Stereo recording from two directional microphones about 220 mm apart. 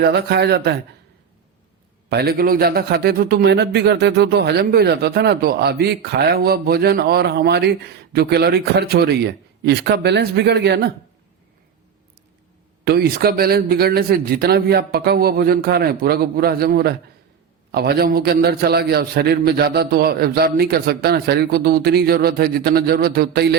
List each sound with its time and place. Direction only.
0.0 s a man's voice: 50° right (ahead or behind)
2.0 s a man's voice: 45° right (ahead or behind)
12.8 s a man's voice: 45° right (ahead or behind)